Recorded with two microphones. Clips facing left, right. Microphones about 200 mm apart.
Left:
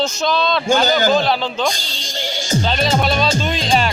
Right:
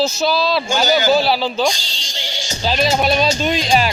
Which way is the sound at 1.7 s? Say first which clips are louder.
Left 4 dB; 55° left (ahead or behind).